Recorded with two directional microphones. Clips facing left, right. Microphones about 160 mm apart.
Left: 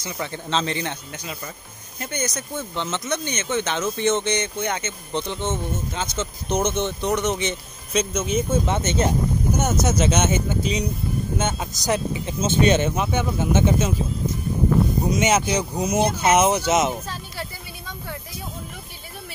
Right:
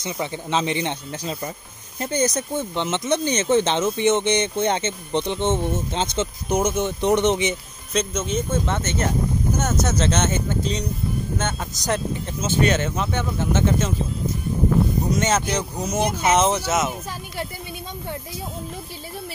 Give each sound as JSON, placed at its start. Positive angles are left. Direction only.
{"t": 0.0, "sound": "speech", "side_deg": -15}
{"t": 6.5, "sound": "speech", "side_deg": -10}
{"t": 7.0, "sound": "speech", "side_deg": -20}
{"t": 7.9, "sound": "speech", "side_deg": 0}
{"t": 8.6, "sound": "speech", "side_deg": 15}
{"t": 12.4, "sound": "speech", "side_deg": 20}
{"t": 15.1, "sound": "speech", "side_deg": 15}
{"t": 16.0, "sound": "speech", "side_deg": -15}
{"t": 16.3, "sound": "speech", "side_deg": 10}